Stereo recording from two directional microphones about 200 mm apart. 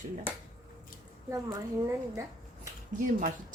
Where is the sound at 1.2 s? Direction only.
15° right (ahead or behind).